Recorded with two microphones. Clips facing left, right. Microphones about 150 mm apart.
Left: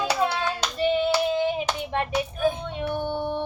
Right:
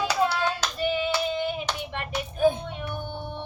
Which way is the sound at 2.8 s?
60° left (ahead or behind).